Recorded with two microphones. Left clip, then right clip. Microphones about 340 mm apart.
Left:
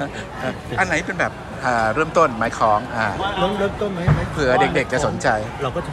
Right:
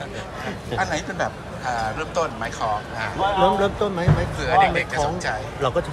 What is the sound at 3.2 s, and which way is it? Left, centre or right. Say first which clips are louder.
Speech: right 7 dB; right.